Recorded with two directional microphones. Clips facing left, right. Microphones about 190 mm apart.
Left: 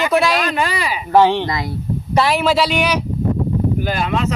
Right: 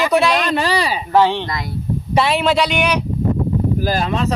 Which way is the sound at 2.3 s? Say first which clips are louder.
Even; 5° left (ahead or behind).